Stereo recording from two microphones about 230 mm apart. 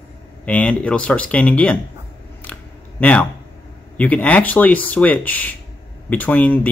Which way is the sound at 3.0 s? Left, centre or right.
Centre.